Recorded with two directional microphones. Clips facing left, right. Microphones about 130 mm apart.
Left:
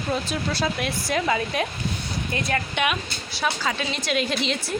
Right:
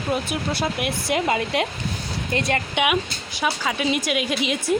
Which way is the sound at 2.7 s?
15° right (ahead or behind).